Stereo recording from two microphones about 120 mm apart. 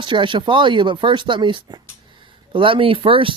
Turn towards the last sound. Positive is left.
turn(degrees=-45)  # may be behind; listen again after turning